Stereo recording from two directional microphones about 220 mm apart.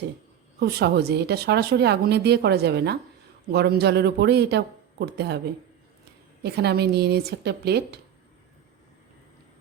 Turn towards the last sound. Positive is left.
turn(degrees=-50)  # may be behind; listen again after turning